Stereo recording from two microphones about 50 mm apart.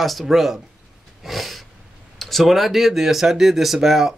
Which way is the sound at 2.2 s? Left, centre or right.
Centre.